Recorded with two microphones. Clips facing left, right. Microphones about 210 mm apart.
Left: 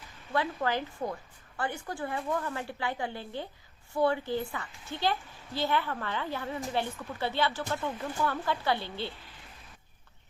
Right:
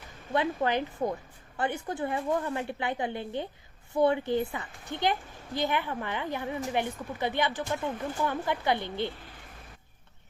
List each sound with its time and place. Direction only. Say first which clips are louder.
0.3 s a woman's voice: right 3 dB; 20° right (ahead or behind)